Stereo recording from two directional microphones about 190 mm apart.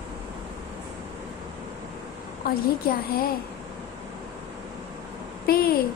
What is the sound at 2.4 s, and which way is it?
Speech, 50° left (ahead or behind).